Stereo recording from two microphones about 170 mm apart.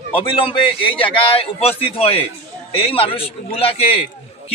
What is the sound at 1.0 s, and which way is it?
A man's voice, 30° left (ahead or behind).